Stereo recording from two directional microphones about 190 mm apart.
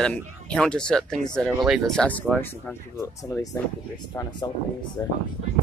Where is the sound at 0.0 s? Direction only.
5° left (ahead or behind); by 5.1 s 20° left (ahead or behind).